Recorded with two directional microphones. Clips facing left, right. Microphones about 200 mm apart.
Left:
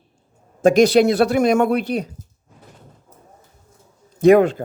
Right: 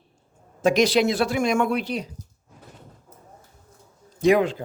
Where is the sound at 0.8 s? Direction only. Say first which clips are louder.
Left 7 dB; 55° left (ahead or behind).